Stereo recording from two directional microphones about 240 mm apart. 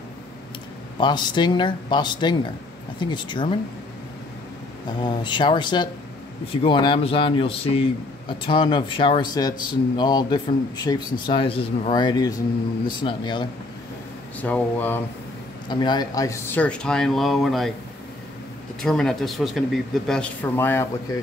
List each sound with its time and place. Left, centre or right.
0.9 s speech: centre
5.0 s speech: centre
14.4 s speech: centre
15.7 s speech: centre
18.8 s speech: centre